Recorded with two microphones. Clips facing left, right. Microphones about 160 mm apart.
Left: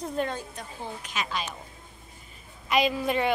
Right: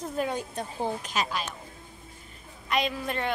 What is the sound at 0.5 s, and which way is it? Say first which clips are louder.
Speech: right 7 dB; 35° right (ahead or behind).